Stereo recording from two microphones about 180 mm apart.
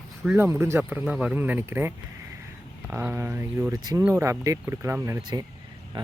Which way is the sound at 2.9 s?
10° right (ahead or behind).